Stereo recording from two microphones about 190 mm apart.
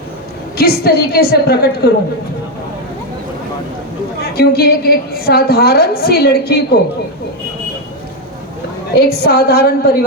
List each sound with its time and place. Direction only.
0.5 s a woman's voice: 55° left (ahead or behind)
4.2 s a woman's voice: 55° left (ahead or behind)
9.0 s a woman's voice: 55° left (ahead or behind)